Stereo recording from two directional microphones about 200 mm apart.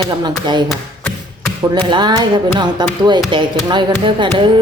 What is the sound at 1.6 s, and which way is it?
Speech, 20° right (ahead or behind).